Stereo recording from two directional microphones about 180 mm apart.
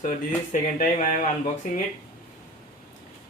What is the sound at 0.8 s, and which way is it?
Speech, 50° left (ahead or behind).